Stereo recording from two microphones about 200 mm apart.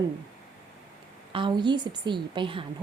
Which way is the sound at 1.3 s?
25° right (ahead or behind).